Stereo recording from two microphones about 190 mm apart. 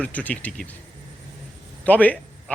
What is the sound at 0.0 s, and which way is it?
Speech, 10° left (ahead or behind).